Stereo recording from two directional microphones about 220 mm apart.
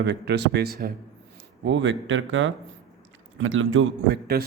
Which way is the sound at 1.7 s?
55° right (ahead or behind).